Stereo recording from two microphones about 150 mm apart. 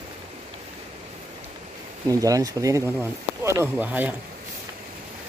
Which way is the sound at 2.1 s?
25° right (ahead or behind).